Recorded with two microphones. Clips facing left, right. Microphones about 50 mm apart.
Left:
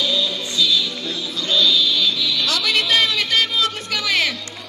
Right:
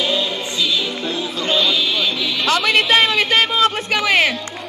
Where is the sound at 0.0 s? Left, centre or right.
Right.